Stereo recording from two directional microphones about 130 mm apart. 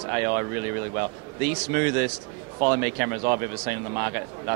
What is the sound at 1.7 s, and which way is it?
Speech, 20° right (ahead or behind).